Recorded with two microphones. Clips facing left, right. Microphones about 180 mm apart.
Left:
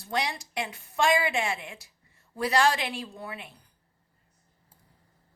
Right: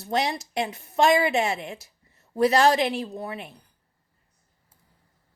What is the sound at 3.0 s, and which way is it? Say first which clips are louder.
Speech: right 7 dB; 40° right (ahead or behind).